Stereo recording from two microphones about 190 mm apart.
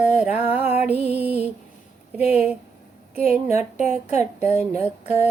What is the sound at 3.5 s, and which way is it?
Speech, 35° left (ahead or behind).